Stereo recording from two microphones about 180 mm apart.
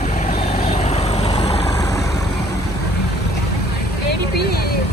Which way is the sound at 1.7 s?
20° left (ahead or behind).